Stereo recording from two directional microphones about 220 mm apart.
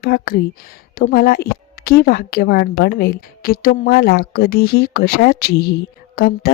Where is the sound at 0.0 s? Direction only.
45° left (ahead or behind).